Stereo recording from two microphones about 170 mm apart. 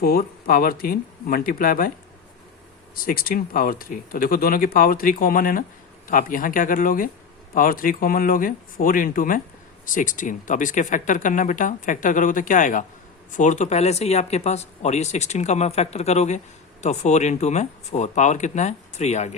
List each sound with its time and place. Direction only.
0.0 s speech: 60° left (ahead or behind)
2.9 s speech: 55° left (ahead or behind); by 19.4 s 40° left (ahead or behind)